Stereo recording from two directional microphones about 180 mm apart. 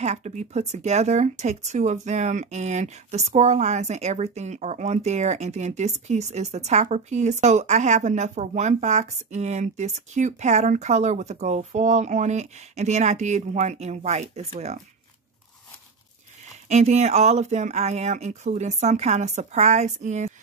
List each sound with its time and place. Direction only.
0.0 s speech: 40° right (ahead or behind)
16.6 s speech: 40° right (ahead or behind)